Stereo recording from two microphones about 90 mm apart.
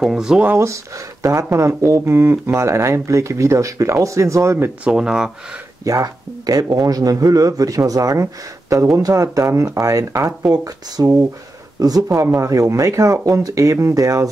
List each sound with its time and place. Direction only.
0.0 s speech: 5° right (ahead or behind)
0.6 s speech: 35° right (ahead or behind)
4.8 s speech: 10° right (ahead or behind)
5.9 s speech: 40° right (ahead or behind)